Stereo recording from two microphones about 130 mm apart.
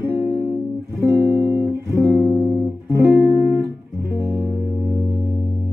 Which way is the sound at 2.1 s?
Centre (ahead or behind).